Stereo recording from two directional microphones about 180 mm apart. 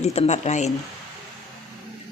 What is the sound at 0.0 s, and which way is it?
Speech, 35° left (ahead or behind).